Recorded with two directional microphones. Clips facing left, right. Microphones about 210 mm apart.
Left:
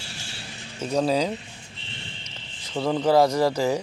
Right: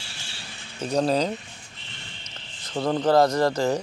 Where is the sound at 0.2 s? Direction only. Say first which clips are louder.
Left 3 dB; 40° left (ahead or behind).